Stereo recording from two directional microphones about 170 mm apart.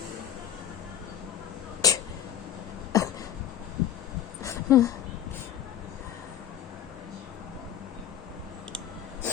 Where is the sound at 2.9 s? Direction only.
20° left (ahead or behind).